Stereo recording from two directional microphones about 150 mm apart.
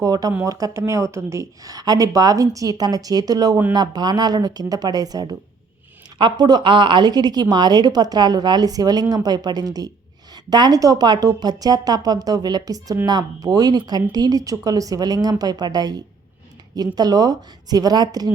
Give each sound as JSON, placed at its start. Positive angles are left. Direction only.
{"t": 0.0, "sound": "a woman's voice", "side_deg": -25}